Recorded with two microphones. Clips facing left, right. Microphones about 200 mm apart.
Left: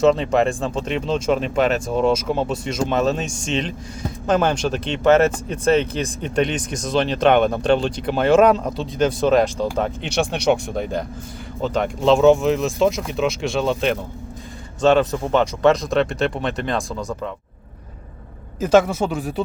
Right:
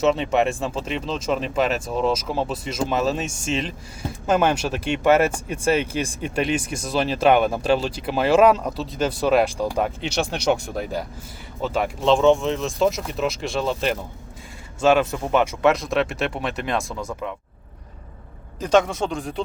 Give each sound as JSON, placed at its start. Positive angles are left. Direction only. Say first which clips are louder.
{"t": 0.0, "sound": "speech", "louder": "left 3 dB", "side_deg": -5}
{"t": 10.0, "sound": "speech", "louder": "left 3 dB", "side_deg": 55}
{"t": 11.6, "sound": "speech", "louder": "left 3 dB", "side_deg": -5}
{"t": 18.6, "sound": "speech", "louder": "left 3 dB", "side_deg": 5}